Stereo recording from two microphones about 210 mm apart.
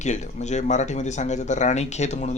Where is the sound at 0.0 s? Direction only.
35° left (ahead or behind).